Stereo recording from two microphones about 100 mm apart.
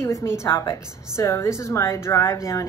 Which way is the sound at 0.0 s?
30° left (ahead or behind).